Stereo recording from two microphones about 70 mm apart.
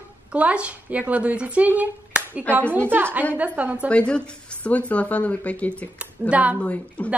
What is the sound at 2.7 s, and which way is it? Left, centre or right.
A woman's voice, right.